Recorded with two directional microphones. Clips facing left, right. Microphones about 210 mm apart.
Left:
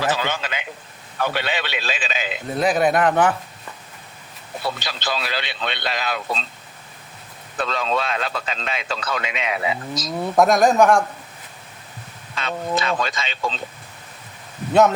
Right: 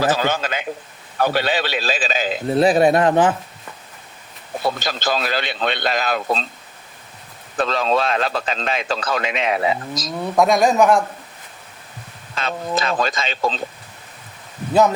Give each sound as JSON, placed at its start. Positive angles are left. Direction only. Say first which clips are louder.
{"t": 0.0, "sound": "a man's voice", "louder": "right 4 dB", "side_deg": -40}
{"t": 4.6, "sound": "speech", "louder": "right 5 dB", "side_deg": -45}
{"t": 7.5, "sound": "speech", "louder": "right 4 dB", "side_deg": -45}
{"t": 10.2, "sound": "speech", "louder": "even", "side_deg": 0}
{"t": 12.3, "sound": "a man's voice", "louder": "right 1 dB", "side_deg": -40}
{"t": 14.7, "sound": "speech", "louder": "even", "side_deg": 0}